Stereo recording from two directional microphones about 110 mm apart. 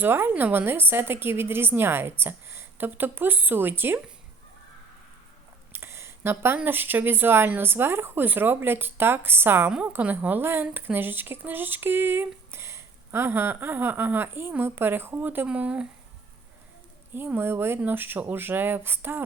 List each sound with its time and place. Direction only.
0.0 s speech: 20° right (ahead or behind)
5.7 s a sound: 20° right (ahead or behind)
6.6 s speech: 20° right (ahead or behind)
17.2 s speech: 20° right (ahead or behind)